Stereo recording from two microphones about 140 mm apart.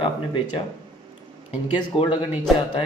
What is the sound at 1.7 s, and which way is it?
Speech, 35° left (ahead or behind).